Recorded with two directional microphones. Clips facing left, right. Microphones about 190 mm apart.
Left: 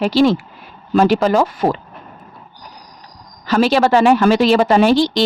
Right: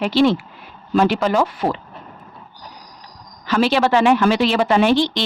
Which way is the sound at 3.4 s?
40° left (ahead or behind).